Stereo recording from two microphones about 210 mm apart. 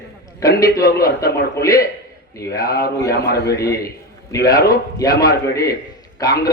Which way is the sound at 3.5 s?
15° left (ahead or behind).